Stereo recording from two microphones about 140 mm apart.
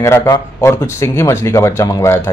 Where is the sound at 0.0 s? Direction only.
20° left (ahead or behind).